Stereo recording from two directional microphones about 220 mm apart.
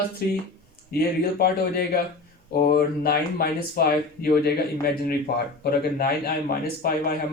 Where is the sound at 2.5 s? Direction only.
45° left (ahead or behind).